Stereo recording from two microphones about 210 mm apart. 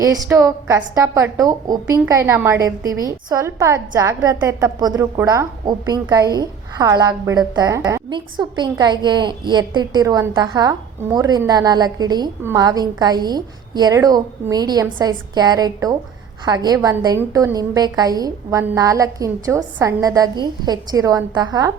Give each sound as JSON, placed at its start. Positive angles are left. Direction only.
{"t": 0.0, "sound": "a woman's voice", "side_deg": -15}